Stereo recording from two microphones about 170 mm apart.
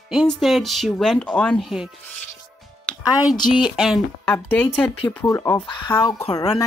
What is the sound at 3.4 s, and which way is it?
Speech, 25° left (ahead or behind).